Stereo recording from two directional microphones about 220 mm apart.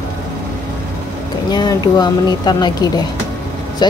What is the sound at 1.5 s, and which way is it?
Speech, 20° left (ahead or behind).